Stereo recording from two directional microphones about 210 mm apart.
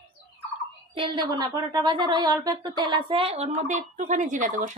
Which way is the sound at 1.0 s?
25° right (ahead or behind).